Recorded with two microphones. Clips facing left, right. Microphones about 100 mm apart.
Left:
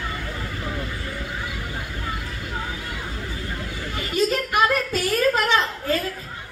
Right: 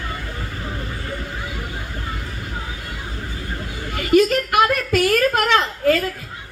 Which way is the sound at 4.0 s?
65° right (ahead or behind).